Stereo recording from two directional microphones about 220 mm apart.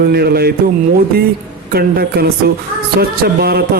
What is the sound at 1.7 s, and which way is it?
A man's voice, 45° right (ahead or behind).